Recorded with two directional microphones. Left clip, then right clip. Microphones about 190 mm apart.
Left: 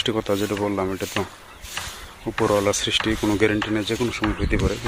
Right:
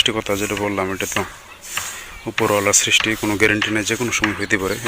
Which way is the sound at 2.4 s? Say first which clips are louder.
Right 2 dB; centre (ahead or behind).